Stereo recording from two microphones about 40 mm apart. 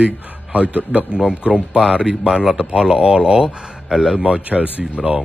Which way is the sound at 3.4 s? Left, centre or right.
Centre.